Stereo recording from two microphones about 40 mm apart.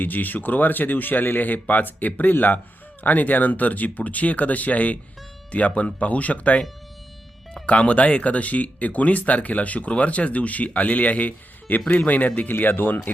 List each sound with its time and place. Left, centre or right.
0.0 s speech: left
12.5 s speech: left